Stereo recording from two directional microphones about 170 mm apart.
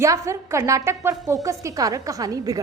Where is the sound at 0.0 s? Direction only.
15° right (ahead or behind).